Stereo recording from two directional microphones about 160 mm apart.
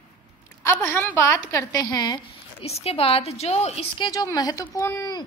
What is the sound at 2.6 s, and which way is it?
A woman's voice, 40° left (ahead or behind).